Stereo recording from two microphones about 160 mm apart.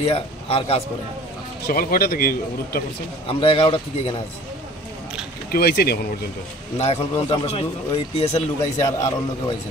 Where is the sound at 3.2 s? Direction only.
35° left (ahead or behind).